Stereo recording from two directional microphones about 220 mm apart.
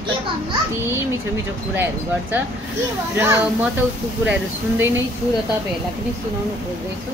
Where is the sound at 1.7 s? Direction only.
10° right (ahead or behind).